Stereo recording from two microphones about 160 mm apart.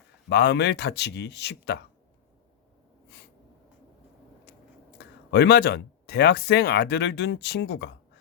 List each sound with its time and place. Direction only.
0.3 s a man's voice: 85° left
4.9 s speech: 90° left